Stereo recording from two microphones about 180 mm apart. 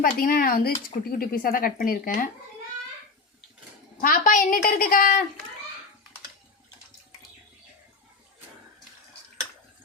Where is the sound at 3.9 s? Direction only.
50° left (ahead or behind).